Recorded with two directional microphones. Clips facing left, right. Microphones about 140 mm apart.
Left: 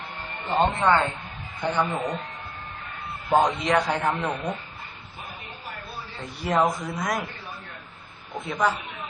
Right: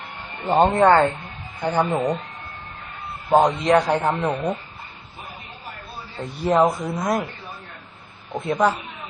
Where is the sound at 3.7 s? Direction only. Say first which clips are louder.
Right 6 dB; 25° right (ahead or behind).